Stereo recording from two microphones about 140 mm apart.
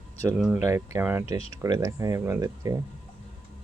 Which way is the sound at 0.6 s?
20° right (ahead or behind).